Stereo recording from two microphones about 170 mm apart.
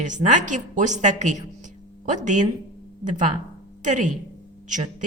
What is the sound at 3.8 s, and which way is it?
A woman's voice, 45° right (ahead or behind).